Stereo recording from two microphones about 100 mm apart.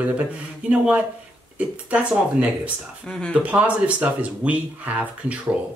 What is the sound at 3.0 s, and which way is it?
Speech, 5° left (ahead or behind).